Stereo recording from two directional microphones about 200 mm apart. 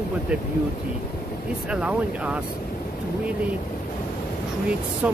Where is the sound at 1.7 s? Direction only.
5° right (ahead or behind).